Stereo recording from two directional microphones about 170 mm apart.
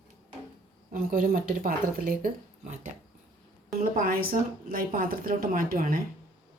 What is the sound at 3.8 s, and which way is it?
A woman's voice, 55° right (ahead or behind).